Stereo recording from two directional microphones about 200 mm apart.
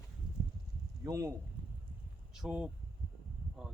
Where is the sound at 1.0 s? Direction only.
15° right (ahead or behind).